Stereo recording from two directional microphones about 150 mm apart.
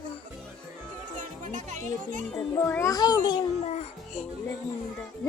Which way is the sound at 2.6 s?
15° left (ahead or behind).